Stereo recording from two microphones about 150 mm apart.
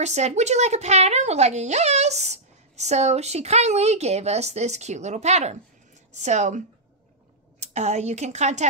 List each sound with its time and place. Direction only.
0.0 s speech: 50° right (ahead or behind)
7.6 s speech: 50° right (ahead or behind)